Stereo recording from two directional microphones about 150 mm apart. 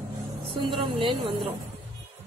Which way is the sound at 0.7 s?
35° right (ahead or behind).